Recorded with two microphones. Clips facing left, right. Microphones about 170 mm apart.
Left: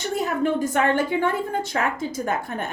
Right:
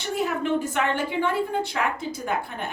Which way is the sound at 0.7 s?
45° left (ahead or behind).